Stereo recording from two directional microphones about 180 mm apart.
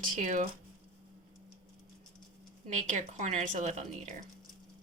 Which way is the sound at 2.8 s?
40° right (ahead or behind).